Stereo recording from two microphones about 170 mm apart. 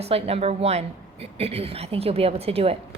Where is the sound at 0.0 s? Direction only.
35° right (ahead or behind).